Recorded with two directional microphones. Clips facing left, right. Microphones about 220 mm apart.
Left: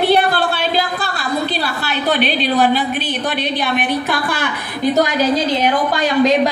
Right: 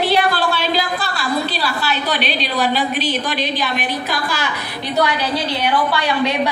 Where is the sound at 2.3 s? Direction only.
50° left (ahead or behind).